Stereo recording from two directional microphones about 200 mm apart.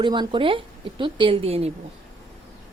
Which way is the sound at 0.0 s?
25° right (ahead or behind).